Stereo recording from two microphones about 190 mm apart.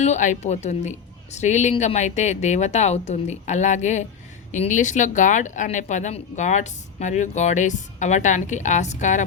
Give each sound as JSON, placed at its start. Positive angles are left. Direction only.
{"t": 0.0, "sound": "speech", "side_deg": 40}